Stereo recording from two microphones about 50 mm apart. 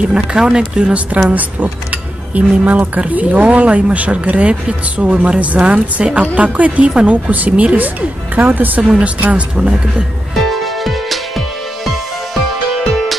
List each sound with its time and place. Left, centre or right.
0.1 s speech: centre
1.3 s speech: right
8.8 s speech: right
10.5 s music: centre